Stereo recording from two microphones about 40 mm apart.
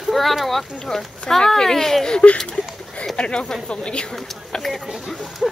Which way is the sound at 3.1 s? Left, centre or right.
Left.